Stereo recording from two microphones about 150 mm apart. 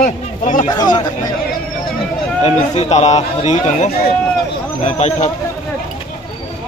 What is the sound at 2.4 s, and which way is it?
Speech, 45° left (ahead or behind).